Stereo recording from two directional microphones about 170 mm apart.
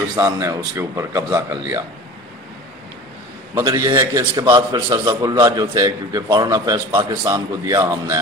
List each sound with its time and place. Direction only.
0.2 s speech: 15° right (ahead or behind)
3.5 s a man's voice: 25° right (ahead or behind)